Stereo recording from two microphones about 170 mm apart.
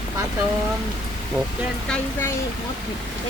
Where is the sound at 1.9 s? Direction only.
15° left (ahead or behind).